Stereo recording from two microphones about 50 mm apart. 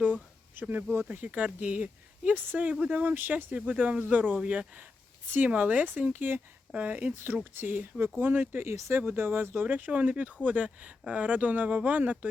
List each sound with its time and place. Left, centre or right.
0.0 s a sound: right
1.0 s speech: right
4.4 s speech: right
5.3 s speech: right
6.7 s speech: right
7.6 s speech: right
9.6 s speech: right